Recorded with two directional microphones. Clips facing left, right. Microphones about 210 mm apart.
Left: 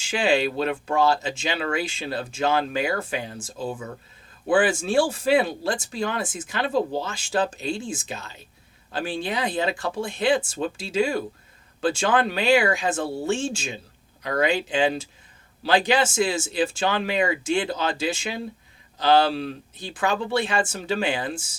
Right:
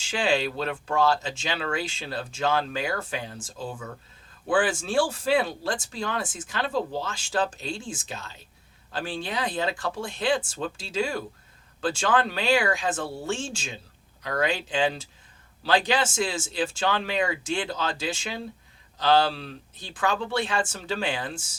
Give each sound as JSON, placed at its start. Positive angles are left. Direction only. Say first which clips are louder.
{"t": 0.1, "sound": "speech", "louder": "left 3 dB", "side_deg": 10}
{"t": 4.9, "sound": "speech", "louder": "left 3 dB", "side_deg": 10}